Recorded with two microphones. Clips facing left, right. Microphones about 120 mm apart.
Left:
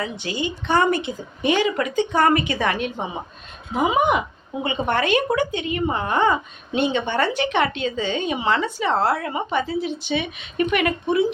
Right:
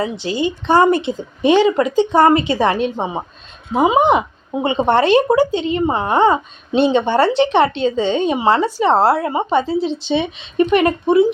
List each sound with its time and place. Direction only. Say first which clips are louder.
0.0 s a woman's voice: right 7 dB; 25° right (ahead or behind)